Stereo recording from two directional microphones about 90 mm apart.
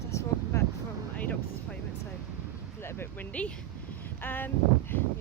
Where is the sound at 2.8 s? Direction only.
25° left (ahead or behind).